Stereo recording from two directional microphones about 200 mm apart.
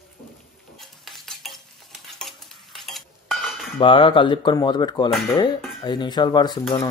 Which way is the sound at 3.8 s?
25° left (ahead or behind).